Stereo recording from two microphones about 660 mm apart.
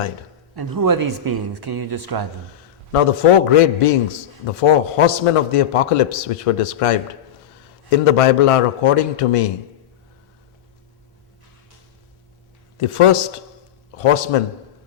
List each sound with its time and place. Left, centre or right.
0.5 s speech: right
2.9 s a man's voice: left
12.7 s a man's voice: left